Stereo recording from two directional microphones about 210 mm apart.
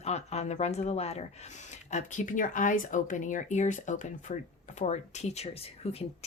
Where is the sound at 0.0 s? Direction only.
30° left (ahead or behind).